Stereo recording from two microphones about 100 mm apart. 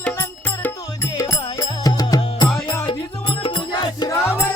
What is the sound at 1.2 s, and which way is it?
Music, 35° left (ahead or behind).